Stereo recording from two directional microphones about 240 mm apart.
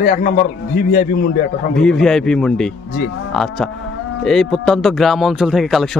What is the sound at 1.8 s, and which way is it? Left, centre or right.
Speech, centre.